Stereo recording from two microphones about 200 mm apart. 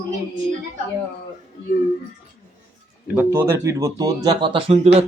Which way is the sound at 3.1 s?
10° right (ahead or behind).